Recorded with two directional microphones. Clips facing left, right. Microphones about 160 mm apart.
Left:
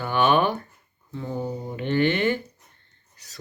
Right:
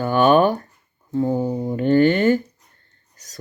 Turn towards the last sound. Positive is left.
turn(degrees=-45)  # may be behind; listen again after turning